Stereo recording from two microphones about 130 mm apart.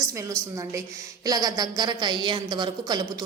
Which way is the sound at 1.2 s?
30° right (ahead or behind).